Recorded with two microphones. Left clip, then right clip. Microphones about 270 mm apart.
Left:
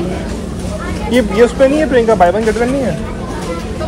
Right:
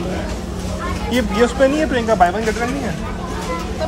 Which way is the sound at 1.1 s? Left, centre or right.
Centre.